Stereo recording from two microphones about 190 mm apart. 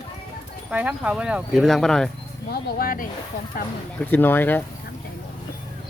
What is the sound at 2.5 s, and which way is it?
Speech, 50° left (ahead or behind).